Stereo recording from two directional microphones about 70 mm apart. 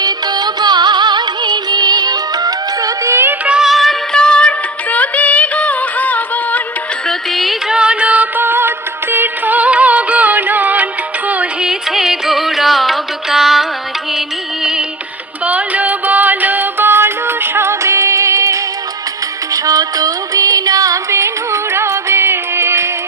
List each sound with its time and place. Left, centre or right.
0.0 s music: right
3.4 s music: centre
3.7 s music: centre
4.1 s music: centre
7.1 s music: centre
7.7 s music: centre
11.6 s music: centre
15.4 s music: right